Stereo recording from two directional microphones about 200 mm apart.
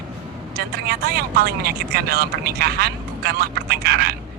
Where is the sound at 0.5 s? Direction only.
50° right (ahead or behind).